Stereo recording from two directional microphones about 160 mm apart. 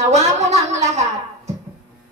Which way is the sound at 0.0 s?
45° right (ahead or behind).